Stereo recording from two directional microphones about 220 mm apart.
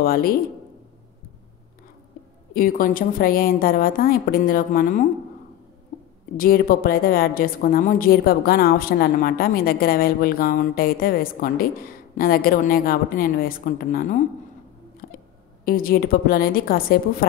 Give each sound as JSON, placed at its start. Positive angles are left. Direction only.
{"t": 0.0, "sound": "a woman's voice", "side_deg": 40}
{"t": 2.5, "sound": "a woman's voice", "side_deg": 40}
{"t": 6.3, "sound": "a woman's voice", "side_deg": 40}
{"t": 15.0, "sound": "a sound", "side_deg": 45}
{"t": 15.6, "sound": "a woman's voice", "side_deg": 40}